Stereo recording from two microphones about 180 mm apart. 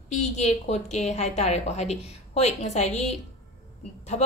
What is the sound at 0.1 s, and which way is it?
Speech, 40° left (ahead or behind).